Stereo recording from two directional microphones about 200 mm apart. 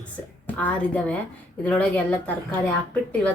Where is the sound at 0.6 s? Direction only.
5° left (ahead or behind).